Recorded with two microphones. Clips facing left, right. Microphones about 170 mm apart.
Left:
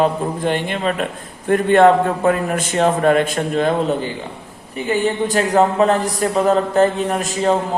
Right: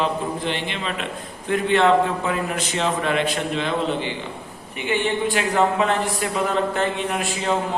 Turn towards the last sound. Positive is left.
turn(degrees=40)  # may be behind; listen again after turning